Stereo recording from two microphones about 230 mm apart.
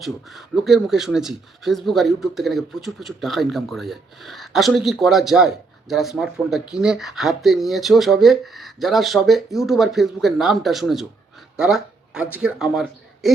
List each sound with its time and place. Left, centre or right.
0.0 s speech: centre